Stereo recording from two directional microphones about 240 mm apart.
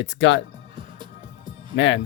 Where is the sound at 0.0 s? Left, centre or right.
Left.